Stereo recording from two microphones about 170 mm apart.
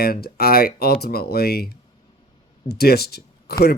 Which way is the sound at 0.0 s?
65° left (ahead or behind).